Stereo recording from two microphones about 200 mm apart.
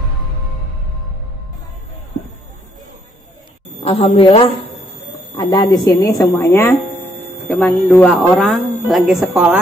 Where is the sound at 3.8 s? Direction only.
30° left (ahead or behind).